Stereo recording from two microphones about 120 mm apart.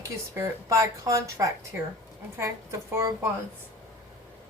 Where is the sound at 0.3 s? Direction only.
25° right (ahead or behind).